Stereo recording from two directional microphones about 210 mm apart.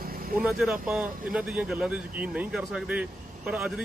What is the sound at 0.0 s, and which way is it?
Vehicle, 45° right (ahead or behind).